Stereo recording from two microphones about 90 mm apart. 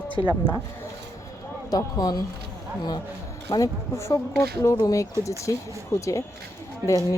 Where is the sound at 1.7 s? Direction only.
50° left (ahead or behind).